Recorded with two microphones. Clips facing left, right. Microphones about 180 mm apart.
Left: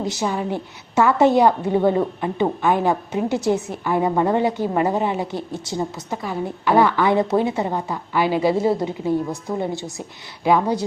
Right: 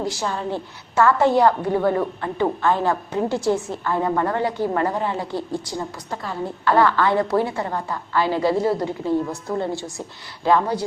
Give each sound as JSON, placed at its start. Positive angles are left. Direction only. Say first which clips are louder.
{"t": 0.0, "sound": "a woman's voice", "louder": "left 2 dB", "side_deg": 20}